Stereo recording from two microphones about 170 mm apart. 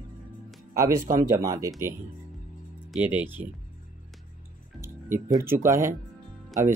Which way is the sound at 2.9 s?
10° right (ahead or behind).